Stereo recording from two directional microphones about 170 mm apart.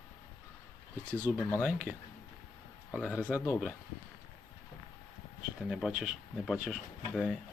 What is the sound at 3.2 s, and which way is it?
Speech, 15° left (ahead or behind).